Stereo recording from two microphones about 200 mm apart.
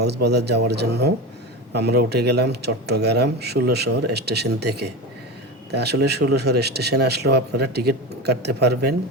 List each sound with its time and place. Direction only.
0.0 s speech: 55° right (ahead or behind)